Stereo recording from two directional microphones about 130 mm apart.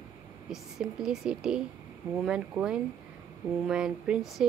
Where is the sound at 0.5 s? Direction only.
5° right (ahead or behind).